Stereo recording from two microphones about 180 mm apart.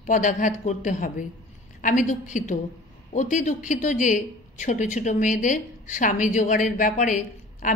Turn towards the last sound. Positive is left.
turn(degrees=45)  # may be behind; listen again after turning